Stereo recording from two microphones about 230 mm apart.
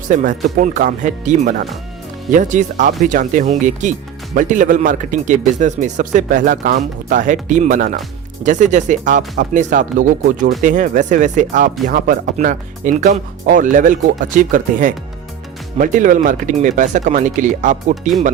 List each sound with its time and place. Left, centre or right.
0.1 s speech: right